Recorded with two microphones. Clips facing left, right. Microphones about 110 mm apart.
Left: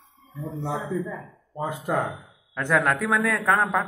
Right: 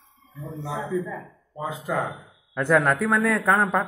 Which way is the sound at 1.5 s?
45° left (ahead or behind).